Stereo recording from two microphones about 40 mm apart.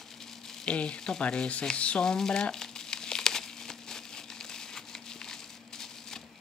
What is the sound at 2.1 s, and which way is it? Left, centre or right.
Crumpling, centre.